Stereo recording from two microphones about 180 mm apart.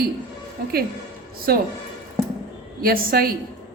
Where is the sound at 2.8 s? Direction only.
55° right (ahead or behind).